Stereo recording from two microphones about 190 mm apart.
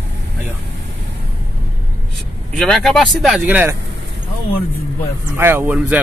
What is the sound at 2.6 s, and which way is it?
Speech, centre (ahead or behind).